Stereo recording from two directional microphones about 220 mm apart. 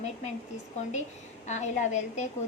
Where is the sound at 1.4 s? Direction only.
30° left (ahead or behind).